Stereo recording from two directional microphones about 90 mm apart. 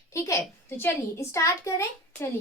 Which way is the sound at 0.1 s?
35° left (ahead or behind).